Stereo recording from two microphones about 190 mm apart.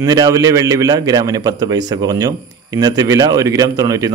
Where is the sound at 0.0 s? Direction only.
20° right (ahead or behind).